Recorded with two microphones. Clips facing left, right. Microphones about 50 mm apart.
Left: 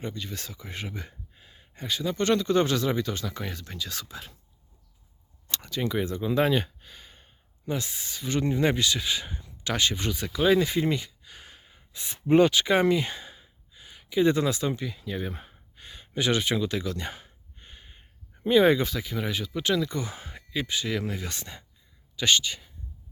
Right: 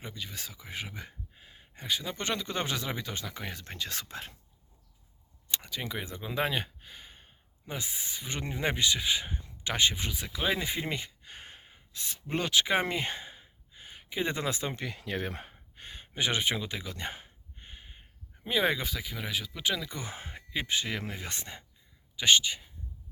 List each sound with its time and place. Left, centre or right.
0.0 s speech: centre
3.6 s speech: right
5.5 s speech: centre
10.0 s speech: centre
10.9 s a sound: right
11.9 s speech: left
12.4 s speech: centre
12.6 s speech: right
14.8 s speech: right
15.5 s speech: right
17.2 s a sound: centre
18.4 s speech: centre
20.0 s speech: right